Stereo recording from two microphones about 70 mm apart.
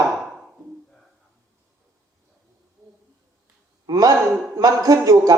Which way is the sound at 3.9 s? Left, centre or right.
Right.